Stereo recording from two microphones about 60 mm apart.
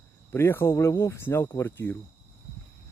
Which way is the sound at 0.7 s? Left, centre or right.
Left.